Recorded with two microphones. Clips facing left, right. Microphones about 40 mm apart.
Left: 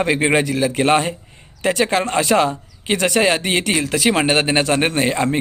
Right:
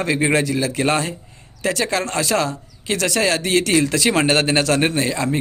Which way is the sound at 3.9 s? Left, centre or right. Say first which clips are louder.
Left 1 dB; centre.